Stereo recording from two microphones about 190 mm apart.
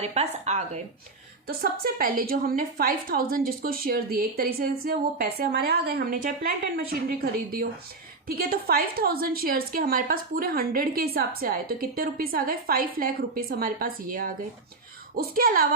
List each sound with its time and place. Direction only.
0.0 s speech: 35° right (ahead or behind)
1.5 s a woman's voice: 50° right (ahead or behind)